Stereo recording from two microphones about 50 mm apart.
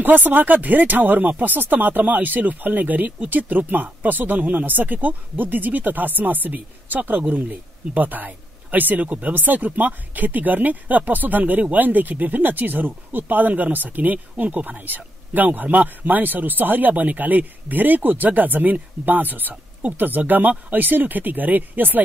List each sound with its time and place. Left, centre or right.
0.0 s speech: right